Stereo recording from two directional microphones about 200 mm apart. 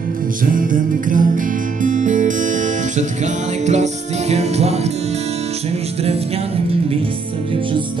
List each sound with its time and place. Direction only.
0.5 s music: 45° right (ahead or behind)
3.6 s music: 35° right (ahead or behind)